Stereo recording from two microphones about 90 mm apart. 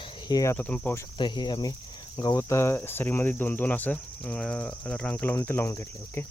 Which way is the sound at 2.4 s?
30° left (ahead or behind).